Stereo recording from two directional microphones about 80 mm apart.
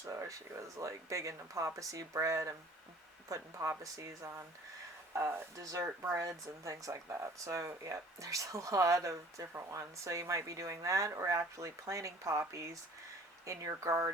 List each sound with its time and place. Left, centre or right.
0.0 s speech: right